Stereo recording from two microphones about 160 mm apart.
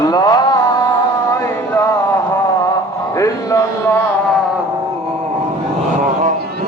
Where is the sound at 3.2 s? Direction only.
20° left (ahead or behind).